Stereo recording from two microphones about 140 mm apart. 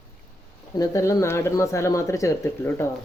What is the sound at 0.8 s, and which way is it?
Speech, 25° left (ahead or behind).